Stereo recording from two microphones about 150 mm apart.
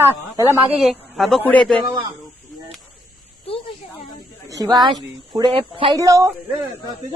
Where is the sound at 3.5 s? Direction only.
40° left (ahead or behind).